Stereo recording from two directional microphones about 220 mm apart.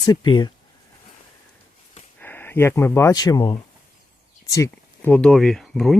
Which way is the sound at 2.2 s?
10° left (ahead or behind).